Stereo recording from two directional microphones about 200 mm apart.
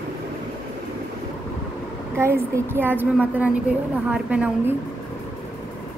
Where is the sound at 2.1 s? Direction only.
10° right (ahead or behind).